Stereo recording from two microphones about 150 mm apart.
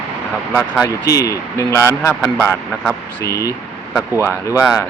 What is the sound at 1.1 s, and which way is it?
Speech, 20° left (ahead or behind).